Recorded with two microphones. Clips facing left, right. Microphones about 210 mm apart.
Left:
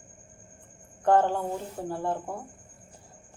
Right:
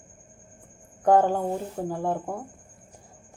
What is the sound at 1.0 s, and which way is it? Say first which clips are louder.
Speech: right 3 dB; 15° right (ahead or behind).